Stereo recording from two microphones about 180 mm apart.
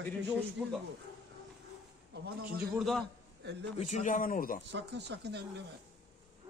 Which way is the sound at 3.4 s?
75° right (ahead or behind).